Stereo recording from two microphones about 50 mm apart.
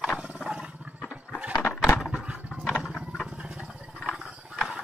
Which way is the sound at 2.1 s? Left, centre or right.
Centre.